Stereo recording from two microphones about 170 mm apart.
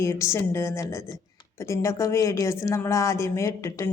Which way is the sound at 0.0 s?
15° left (ahead or behind).